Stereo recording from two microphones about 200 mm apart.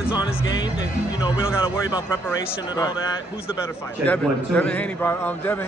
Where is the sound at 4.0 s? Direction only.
5° left (ahead or behind).